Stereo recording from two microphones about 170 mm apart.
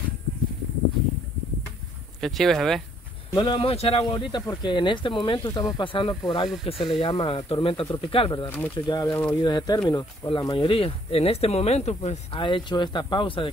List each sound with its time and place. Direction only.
2.1 s speech: centre (ahead or behind)
3.3 s speech: 30° left (ahead or behind)
8.5 s speech: 10° left (ahead or behind)
8.7 s speech: 25° left (ahead or behind)